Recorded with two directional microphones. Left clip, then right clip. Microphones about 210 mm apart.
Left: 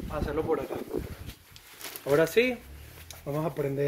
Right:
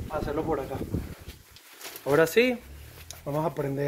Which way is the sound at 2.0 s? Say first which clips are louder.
Right 2 dB; 35° right (ahead or behind).